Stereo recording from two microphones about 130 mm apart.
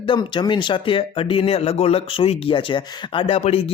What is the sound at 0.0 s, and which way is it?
Speech, 40° left (ahead or behind).